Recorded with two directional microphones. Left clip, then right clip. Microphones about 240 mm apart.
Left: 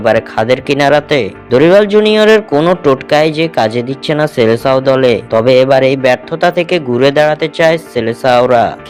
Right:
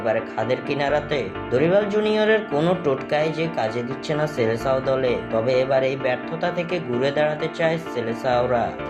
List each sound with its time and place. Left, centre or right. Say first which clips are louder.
0.0 s speech: left 12 dB; left